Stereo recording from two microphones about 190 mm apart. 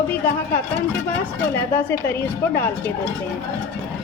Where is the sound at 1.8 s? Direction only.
10° left (ahead or behind).